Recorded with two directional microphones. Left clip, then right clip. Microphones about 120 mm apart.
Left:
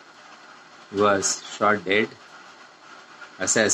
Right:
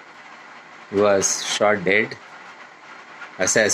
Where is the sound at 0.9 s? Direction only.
30° right (ahead or behind).